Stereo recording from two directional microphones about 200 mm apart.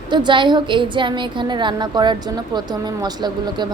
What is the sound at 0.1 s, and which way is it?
Speech, 20° right (ahead or behind).